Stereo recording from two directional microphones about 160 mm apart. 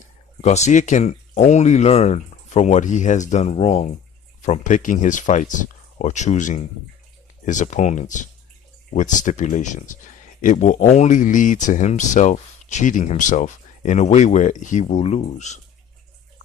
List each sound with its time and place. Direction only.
0.4 s speech: 45° left (ahead or behind)